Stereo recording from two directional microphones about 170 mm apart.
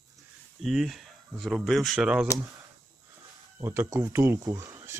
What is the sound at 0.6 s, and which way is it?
Speech, centre (ahead or behind).